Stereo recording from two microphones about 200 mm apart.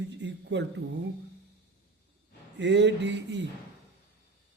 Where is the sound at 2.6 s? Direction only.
60° right (ahead or behind).